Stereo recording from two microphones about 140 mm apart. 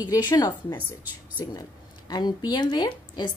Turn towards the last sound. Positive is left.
turn(degrees=30)  # may be behind; listen again after turning